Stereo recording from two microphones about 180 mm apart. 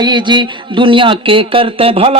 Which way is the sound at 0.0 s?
25° right (ahead or behind).